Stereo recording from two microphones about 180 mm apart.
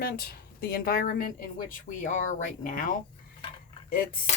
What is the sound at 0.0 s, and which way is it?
Speech, 60° left (ahead or behind).